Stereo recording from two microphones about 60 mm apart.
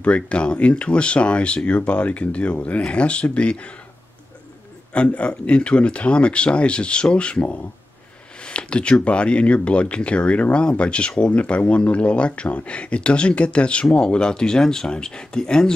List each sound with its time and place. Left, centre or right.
0.0 s speech: centre
4.9 s speech: left